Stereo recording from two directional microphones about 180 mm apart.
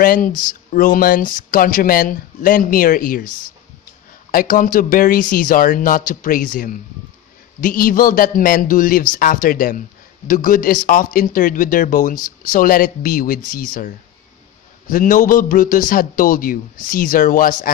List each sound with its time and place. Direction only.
0.0 s a man's voice: 50° left (ahead or behind)
0.3 s speech: 25° left (ahead or behind)
0.7 s a man's voice: 50° left (ahead or behind)
4.3 s a man's voice: 50° left (ahead or behind)